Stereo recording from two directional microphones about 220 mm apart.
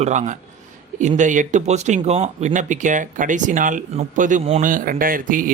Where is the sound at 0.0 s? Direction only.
35° right (ahead or behind).